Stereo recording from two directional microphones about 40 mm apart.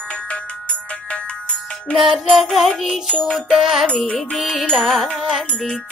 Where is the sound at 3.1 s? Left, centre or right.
Left.